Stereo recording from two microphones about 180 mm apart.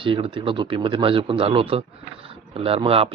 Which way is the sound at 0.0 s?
30° right (ahead or behind).